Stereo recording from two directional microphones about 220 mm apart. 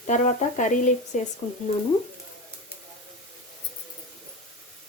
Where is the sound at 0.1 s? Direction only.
35° left (ahead or behind).